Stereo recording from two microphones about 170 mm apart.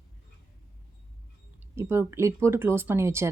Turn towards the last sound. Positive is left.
turn(degrees=-15)  # may be behind; listen again after turning